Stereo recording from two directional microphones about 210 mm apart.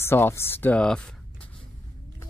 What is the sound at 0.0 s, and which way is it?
Speech, 10° left (ahead or behind).